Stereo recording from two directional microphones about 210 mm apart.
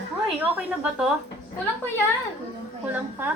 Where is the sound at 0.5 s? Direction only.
5° right (ahead or behind).